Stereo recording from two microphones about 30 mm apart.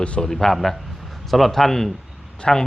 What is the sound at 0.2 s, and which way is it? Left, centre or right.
A man's voice, centre.